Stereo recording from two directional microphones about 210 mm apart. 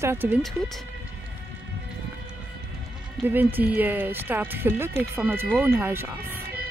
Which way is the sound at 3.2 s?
10° right (ahead or behind).